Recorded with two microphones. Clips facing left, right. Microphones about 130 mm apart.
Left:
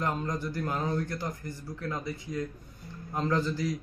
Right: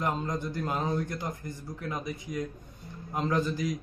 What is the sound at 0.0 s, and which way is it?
A man's voice, 20° right (ahead or behind).